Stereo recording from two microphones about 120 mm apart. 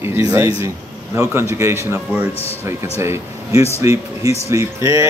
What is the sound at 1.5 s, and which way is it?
Speech, 20° right (ahead or behind).